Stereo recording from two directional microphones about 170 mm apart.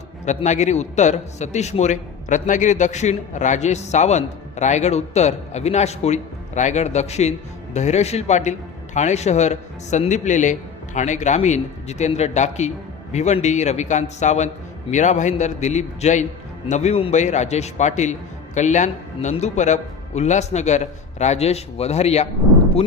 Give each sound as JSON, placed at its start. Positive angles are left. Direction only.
{"t": 0.3, "sound": "a man's voice", "side_deg": 45}